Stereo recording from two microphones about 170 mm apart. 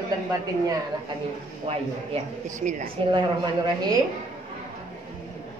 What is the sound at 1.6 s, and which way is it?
Speech, 40° right (ahead or behind).